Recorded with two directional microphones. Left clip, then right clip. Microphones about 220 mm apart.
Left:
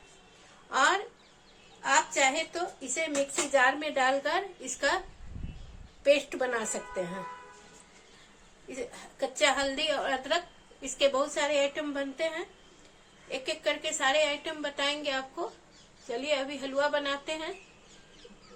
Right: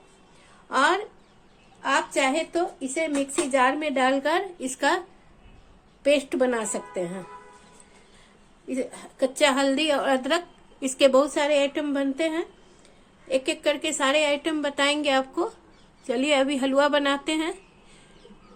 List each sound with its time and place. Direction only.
0.7 s a sound: 45° right (ahead or behind)
1.8 s a woman's voice: 40° right (ahead or behind)
6.0 s a woman's voice: 45° right (ahead or behind)
8.7 s a woman's voice: 45° right (ahead or behind)